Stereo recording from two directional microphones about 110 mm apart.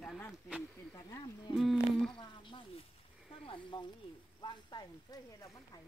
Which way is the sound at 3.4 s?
50° left (ahead or behind).